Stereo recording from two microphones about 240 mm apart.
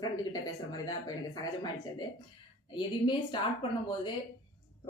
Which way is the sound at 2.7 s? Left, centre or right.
Centre.